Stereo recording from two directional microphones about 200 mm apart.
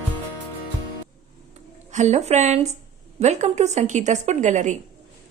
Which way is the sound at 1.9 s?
35° right (ahead or behind).